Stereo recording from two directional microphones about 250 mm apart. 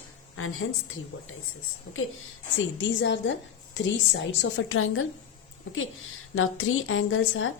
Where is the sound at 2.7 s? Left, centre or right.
Left.